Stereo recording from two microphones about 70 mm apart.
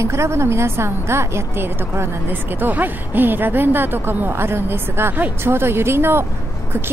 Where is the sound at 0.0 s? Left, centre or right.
Right.